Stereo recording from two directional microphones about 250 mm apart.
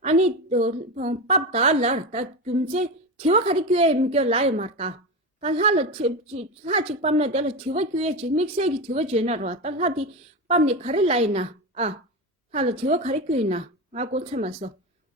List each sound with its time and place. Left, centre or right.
0.0 s a woman's voice: right